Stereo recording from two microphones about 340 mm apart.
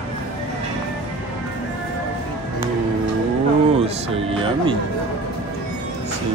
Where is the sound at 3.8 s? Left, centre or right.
Centre.